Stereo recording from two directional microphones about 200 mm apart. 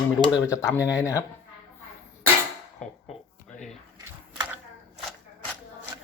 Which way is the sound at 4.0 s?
15° right (ahead or behind).